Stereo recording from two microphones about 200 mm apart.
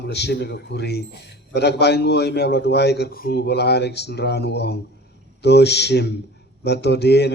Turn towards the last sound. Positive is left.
turn(degrees=55)  # may be behind; listen again after turning